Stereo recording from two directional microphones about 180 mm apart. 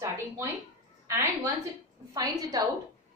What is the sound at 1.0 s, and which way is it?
Speech, 15° right (ahead or behind).